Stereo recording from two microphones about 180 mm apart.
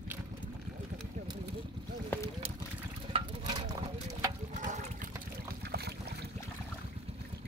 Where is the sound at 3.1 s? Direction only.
30° right (ahead or behind).